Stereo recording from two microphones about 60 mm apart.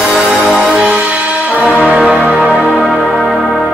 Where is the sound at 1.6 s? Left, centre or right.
Centre.